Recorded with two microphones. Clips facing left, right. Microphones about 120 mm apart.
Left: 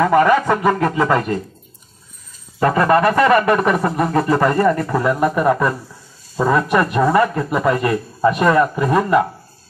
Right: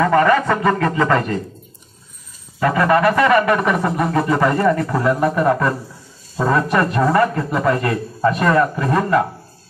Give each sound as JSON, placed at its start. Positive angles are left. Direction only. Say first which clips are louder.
{"t": 0.0, "sound": "a man's voice", "louder": "left 1 dB", "side_deg": 10}
{"t": 2.6, "sound": "a man's voice", "louder": "left 1 dB", "side_deg": 35}
{"t": 4.8, "sound": "a man's voice", "louder": "even", "side_deg": 10}